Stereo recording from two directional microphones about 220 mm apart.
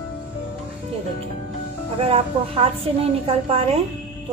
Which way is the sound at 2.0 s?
25° right (ahead or behind).